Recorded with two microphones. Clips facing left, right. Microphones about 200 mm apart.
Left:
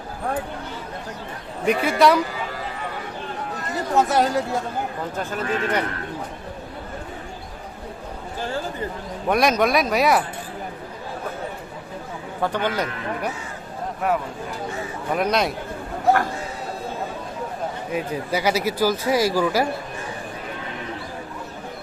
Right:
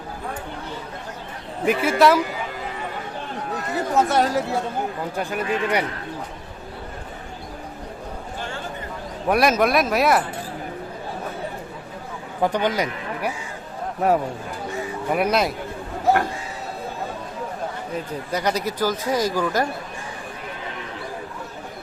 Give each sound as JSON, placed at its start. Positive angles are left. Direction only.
{"t": 1.6, "sound": "speech", "side_deg": -5}
{"t": 3.9, "sound": "speech", "side_deg": 0}
{"t": 5.1, "sound": "a man's voice", "side_deg": -15}
{"t": 9.3, "sound": "speech", "side_deg": -5}
{"t": 12.4, "sound": "a man's voice", "side_deg": -15}
{"t": 14.0, "sound": "speech", "side_deg": -35}
{"t": 15.1, "sound": "speech", "side_deg": -5}
{"t": 17.9, "sound": "speech", "side_deg": 5}